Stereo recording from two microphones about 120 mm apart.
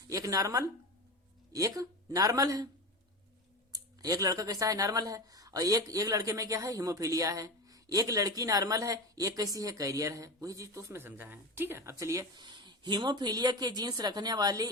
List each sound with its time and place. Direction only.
0.1 s speech: 30° right (ahead or behind)
3.7 s speech: 30° right (ahead or behind)
12.4 s speech: 40° right (ahead or behind)